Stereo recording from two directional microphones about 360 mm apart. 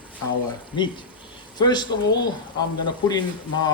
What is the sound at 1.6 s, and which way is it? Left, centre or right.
Speech, centre.